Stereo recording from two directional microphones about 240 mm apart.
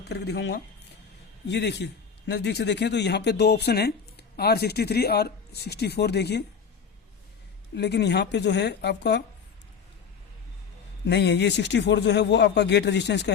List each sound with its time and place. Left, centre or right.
0.1 s a man's voice: left
7.8 s a man's voice: left
11.0 s a man's voice: left